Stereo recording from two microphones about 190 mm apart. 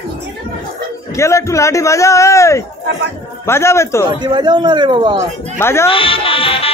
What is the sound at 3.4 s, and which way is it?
Speech, 15° left (ahead or behind).